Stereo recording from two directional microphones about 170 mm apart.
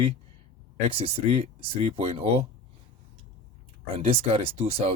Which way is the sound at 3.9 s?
35° right (ahead or behind).